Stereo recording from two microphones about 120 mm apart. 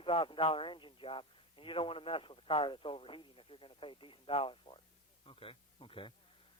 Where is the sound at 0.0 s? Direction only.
50° left (ahead or behind).